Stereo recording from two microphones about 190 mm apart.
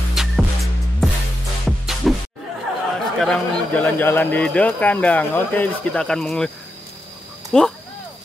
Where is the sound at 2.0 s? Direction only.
Centre (ahead or behind).